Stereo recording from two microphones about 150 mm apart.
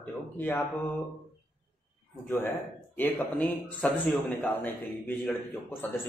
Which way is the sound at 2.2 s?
15° left (ahead or behind).